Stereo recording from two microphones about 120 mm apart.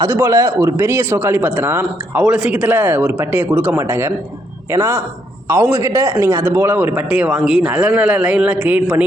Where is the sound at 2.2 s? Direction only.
5° right (ahead or behind).